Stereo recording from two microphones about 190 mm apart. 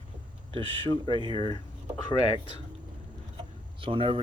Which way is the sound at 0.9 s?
25° left (ahead or behind).